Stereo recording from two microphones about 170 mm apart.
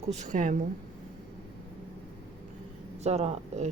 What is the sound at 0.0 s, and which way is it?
Speech, 40° right (ahead or behind).